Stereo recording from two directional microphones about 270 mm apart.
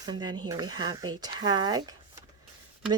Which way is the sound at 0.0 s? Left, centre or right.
Centre.